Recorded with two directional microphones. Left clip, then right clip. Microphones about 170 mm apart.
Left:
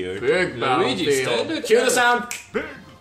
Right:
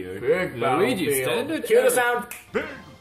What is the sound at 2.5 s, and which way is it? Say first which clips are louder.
Speech: right 2 dB; centre (ahead or behind).